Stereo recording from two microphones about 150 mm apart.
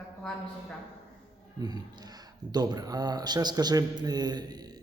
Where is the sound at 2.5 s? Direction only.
25° right (ahead or behind).